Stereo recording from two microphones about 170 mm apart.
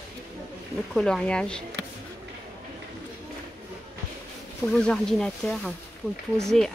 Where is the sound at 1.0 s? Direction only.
5° left (ahead or behind).